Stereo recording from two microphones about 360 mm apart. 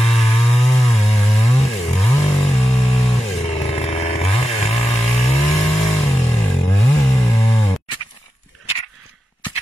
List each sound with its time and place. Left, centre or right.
0.0 s chainsaw: centre